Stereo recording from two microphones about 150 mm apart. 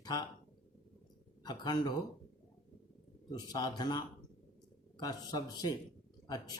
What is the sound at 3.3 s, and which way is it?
Speech, 25° left (ahead or behind).